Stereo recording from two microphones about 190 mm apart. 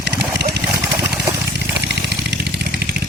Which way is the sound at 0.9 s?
15° right (ahead or behind).